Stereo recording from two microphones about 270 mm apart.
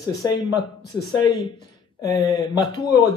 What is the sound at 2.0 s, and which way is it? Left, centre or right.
Speech, centre.